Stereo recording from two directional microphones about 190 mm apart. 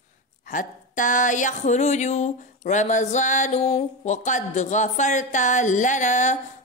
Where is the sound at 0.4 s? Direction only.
45° left (ahead or behind).